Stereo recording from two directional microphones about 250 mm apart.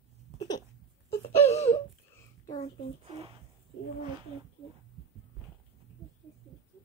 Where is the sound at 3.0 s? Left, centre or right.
Right.